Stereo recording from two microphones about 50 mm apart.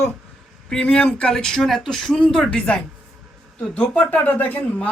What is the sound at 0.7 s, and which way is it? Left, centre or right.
Speech, left.